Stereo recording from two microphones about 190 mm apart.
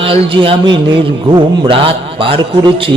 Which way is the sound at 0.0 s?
30° right (ahead or behind).